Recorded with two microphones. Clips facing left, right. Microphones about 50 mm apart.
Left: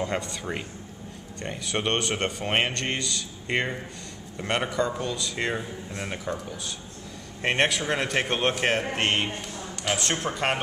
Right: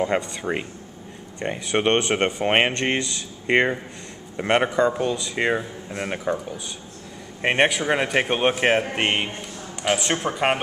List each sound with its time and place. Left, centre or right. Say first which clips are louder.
0.0 s speech: right 6 dB; centre
7.4 s speech: right 4 dB; centre